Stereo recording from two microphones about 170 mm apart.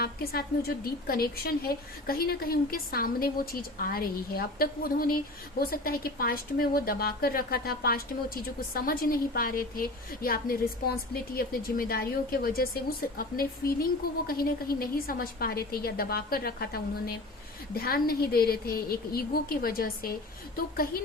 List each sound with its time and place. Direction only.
0.0 s a woman's voice: 60° left (ahead or behind)